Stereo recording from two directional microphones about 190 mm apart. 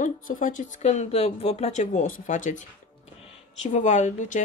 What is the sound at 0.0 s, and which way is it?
A woman's voice, 45° left (ahead or behind).